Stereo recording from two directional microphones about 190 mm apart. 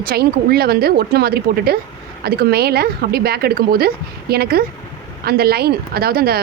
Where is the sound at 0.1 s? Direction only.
55° right (ahead or behind).